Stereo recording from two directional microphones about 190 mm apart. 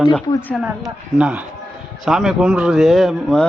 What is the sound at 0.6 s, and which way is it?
A man's voice, 5° right (ahead or behind).